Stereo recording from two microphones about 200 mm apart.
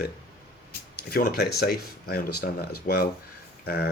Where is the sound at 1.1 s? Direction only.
50° left (ahead or behind).